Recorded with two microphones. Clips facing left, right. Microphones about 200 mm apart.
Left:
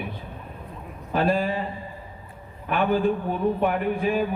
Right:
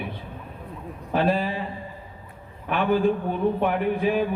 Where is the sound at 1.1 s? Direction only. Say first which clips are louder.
Even; 45° left (ahead or behind).